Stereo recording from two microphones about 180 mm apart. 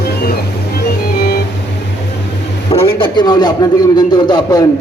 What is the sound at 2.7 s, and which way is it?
A man's voice, 30° left (ahead or behind).